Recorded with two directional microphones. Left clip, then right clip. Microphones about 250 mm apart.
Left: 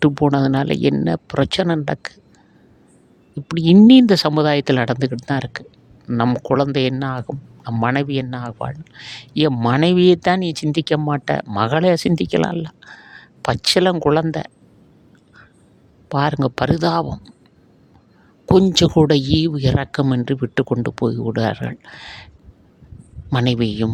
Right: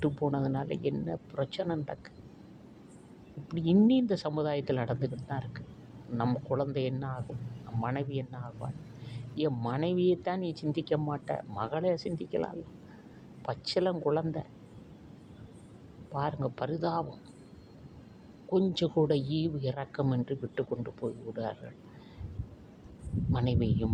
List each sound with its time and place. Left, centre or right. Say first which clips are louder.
0.0 s speech: left 15 dB; left
3.5 s speech: left 16 dB; left
16.1 s speech: left 15 dB; left
18.5 s speech: left 15 dB; left
23.3 s speech: left 13 dB; left